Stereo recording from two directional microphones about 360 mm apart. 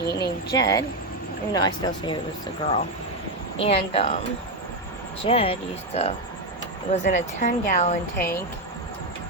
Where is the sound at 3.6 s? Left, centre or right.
Centre.